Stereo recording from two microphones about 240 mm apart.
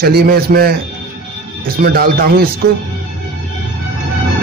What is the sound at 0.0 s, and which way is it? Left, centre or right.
Speech, right.